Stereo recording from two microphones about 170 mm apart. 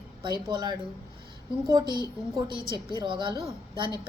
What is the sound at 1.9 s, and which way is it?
A woman's voice, 25° right (ahead or behind).